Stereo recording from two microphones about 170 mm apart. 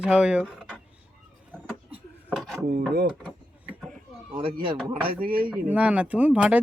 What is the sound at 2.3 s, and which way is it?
Wood, centre (ahead or behind).